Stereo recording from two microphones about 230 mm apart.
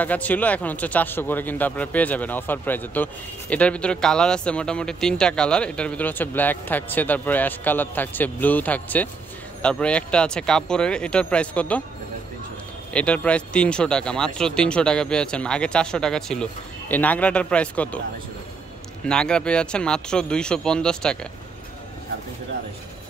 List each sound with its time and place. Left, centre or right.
0.0 s speech: centre
12.9 s speech: centre
19.0 s speech: centre